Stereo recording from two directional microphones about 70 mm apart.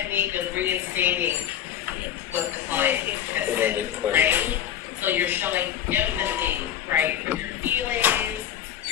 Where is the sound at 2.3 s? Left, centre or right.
Right.